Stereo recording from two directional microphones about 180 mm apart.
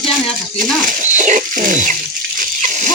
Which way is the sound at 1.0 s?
45° right (ahead or behind).